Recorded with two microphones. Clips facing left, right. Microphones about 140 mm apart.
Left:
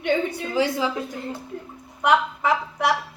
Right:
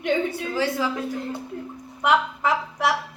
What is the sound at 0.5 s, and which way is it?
Speech, 15° left (ahead or behind).